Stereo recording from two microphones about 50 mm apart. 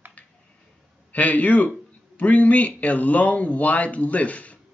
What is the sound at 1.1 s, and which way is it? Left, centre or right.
Speech, left.